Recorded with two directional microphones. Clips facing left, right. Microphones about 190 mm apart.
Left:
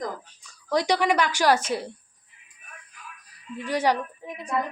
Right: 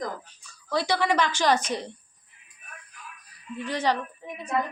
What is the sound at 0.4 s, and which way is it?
Speech, 15° left (ahead or behind).